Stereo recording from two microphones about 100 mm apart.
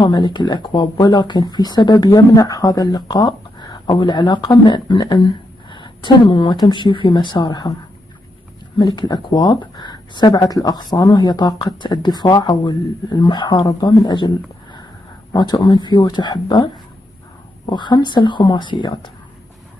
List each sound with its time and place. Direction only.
0.0 s speech: 45° left (ahead or behind)
8.7 s speech: 50° left (ahead or behind)
15.3 s speech: 45° left (ahead or behind)
17.6 s speech: 50° left (ahead or behind)